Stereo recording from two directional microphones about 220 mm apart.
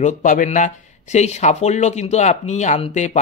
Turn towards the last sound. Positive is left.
turn(degrees=30)  # may be behind; listen again after turning